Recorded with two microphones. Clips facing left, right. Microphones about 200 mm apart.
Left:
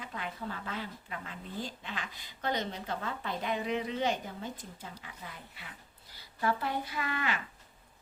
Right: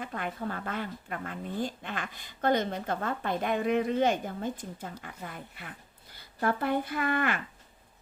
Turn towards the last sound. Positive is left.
turn(degrees=-55)  # may be behind; listen again after turning